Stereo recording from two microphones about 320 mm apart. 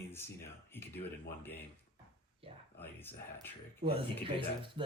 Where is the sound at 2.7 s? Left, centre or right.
Centre.